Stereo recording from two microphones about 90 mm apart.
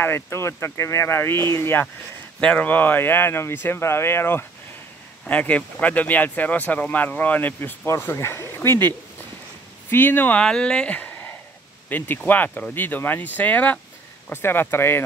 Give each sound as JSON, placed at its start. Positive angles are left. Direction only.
{"t": 0.0, "sound": "speech", "side_deg": 25}
{"t": 2.4, "sound": "speech", "side_deg": 15}
{"t": 5.2, "sound": "speech", "side_deg": 15}
{"t": 10.4, "sound": "speech", "side_deg": 10}